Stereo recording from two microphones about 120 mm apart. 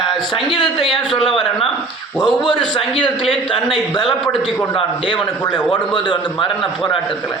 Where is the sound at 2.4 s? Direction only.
40° left (ahead or behind).